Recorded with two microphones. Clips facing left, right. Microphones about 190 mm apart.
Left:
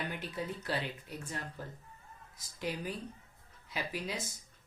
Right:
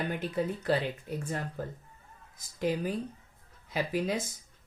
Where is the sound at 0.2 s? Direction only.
50° right (ahead or behind).